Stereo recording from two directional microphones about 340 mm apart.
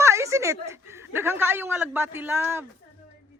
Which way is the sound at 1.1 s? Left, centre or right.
Centre.